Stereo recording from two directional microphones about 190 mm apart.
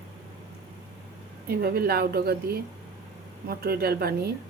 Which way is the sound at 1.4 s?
55° right (ahead or behind).